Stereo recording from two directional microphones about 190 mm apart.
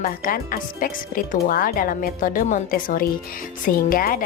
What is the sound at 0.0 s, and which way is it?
Speech, 50° left (ahead or behind).